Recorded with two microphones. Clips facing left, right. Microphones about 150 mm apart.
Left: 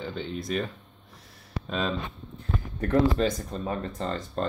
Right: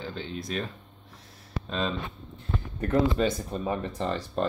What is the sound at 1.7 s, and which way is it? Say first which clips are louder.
Speech: left 1 dB; centre (ahead or behind).